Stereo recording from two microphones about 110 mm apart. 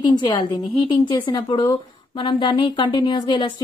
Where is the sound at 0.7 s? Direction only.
45° left (ahead or behind).